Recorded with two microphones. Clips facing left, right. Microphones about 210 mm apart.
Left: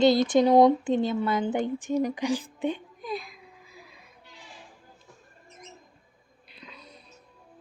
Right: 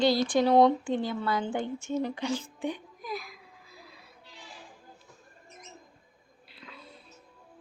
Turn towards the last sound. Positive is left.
turn(degrees=20)  # may be behind; listen again after turning